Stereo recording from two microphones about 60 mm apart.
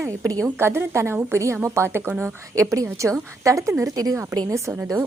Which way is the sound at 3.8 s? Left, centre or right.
Right.